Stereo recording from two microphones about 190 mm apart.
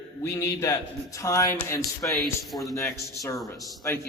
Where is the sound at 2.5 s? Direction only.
Centre (ahead or behind).